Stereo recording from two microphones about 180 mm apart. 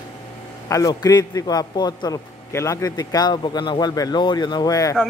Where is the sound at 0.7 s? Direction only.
20° left (ahead or behind).